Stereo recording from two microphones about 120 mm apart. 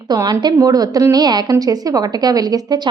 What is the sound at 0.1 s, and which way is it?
A woman's voice, 35° right (ahead or behind).